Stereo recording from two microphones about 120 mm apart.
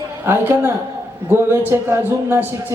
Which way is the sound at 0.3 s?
20° right (ahead or behind).